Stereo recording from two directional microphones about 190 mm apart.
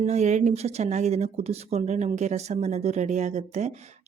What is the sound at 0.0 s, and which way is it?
Speech, 35° right (ahead or behind).